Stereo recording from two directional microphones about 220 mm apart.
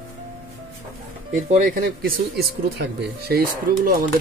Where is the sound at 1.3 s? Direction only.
35° right (ahead or behind).